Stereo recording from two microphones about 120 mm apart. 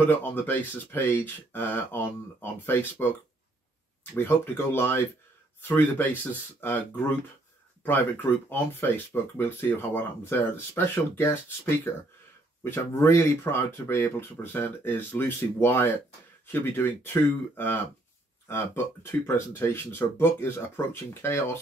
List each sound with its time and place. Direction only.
0.0 s speech: 15° left (ahead or behind)
19.2 s speech: 20° left (ahead or behind)